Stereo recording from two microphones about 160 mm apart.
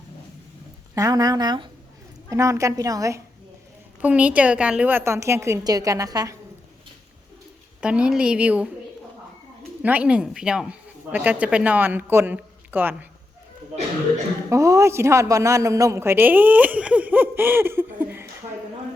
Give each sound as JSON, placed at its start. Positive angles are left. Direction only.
{"t": 0.9, "sound": "a woman's voice", "side_deg": -20}
{"t": 4.0, "sound": "speech", "side_deg": -10}
{"t": 7.8, "sound": "speech", "side_deg": -5}
{"t": 9.8, "sound": "speech", "side_deg": -10}
{"t": 14.5, "sound": "speech", "side_deg": -20}